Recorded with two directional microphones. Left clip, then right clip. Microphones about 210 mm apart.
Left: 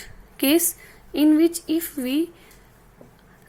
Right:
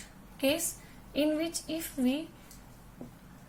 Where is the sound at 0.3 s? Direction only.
50° left (ahead or behind).